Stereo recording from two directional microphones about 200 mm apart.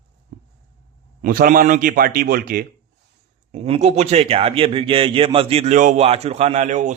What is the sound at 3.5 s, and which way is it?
Speech, 30° right (ahead or behind).